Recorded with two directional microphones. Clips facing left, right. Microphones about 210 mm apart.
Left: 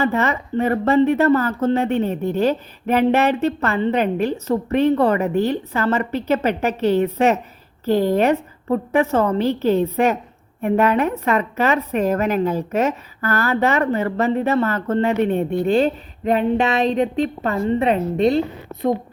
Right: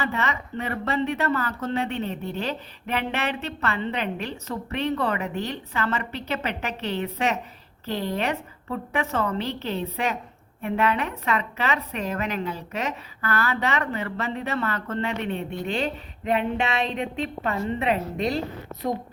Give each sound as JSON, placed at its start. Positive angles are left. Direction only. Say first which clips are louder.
{"t": 0.0, "sound": "a woman's voice", "louder": "left 8 dB", "side_deg": 45}